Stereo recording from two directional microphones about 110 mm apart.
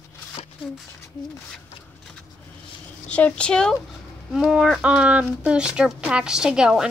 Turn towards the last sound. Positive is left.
turn(degrees=-5)  # may be behind; listen again after turning